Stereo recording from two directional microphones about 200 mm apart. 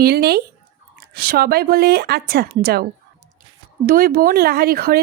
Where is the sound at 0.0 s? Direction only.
50° right (ahead or behind).